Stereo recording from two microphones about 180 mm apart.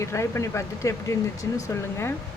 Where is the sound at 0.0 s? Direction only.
15° left (ahead or behind).